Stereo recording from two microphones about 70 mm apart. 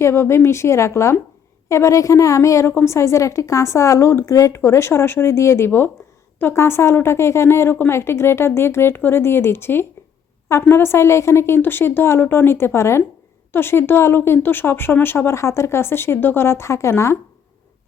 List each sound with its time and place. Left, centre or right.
0.0 s a woman's voice: left